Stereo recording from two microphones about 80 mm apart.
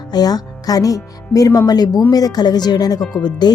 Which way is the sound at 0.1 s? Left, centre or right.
Left.